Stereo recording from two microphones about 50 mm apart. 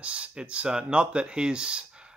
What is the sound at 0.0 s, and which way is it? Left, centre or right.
Speech, right.